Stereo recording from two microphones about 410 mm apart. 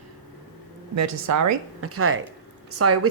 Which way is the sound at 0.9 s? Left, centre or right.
Right.